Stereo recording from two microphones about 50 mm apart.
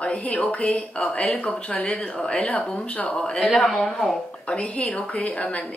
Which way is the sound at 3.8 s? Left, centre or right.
Centre.